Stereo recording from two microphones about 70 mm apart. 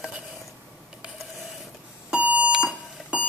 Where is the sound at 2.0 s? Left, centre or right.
Centre.